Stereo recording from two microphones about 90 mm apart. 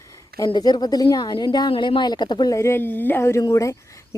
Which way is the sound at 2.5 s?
30° left (ahead or behind).